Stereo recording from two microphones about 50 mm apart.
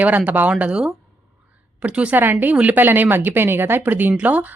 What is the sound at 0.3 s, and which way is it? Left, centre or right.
Speech, right.